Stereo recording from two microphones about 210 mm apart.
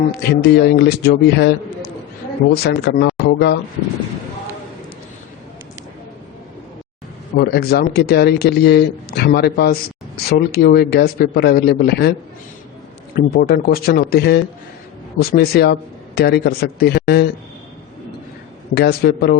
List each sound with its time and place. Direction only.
0.1 s speech: 50° left (ahead or behind)
7.3 s speech: 50° left (ahead or behind)
13.1 s speech: 45° left (ahead or behind)
18.7 s speech: 50° left (ahead or behind)